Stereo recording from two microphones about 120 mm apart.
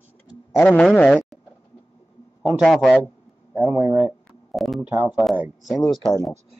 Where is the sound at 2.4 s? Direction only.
Centre (ahead or behind).